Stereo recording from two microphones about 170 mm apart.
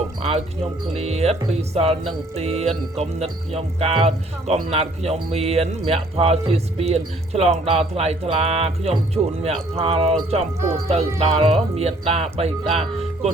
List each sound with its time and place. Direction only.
0.2 s speech: 35° right (ahead or behind)